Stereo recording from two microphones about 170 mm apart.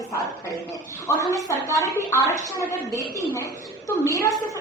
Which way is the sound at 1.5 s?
20° left (ahead or behind).